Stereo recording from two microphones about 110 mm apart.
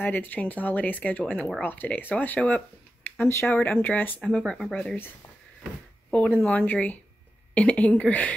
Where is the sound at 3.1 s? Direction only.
25° left (ahead or behind).